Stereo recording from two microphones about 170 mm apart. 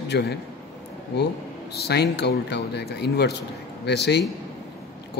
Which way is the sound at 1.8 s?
85° left.